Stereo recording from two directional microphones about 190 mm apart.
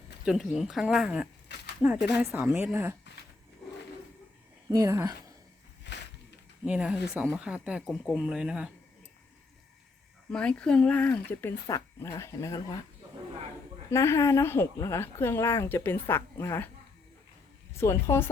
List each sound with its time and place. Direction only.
0.3 s a woman's voice: centre (ahead or behind)
4.7 s a woman's voice: 15° right (ahead or behind)
5.9 s a sound: 65° left (ahead or behind)
6.7 s speech: 5° right (ahead or behind)
10.3 s speech: 5° left (ahead or behind)
13.9 s speech: 15° left (ahead or behind)
17.7 s speech: 15° left (ahead or behind)